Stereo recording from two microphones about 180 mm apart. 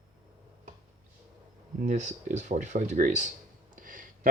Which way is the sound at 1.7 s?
40° right (ahead or behind).